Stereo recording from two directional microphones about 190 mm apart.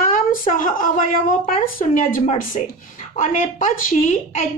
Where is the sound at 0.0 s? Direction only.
45° left (ahead or behind).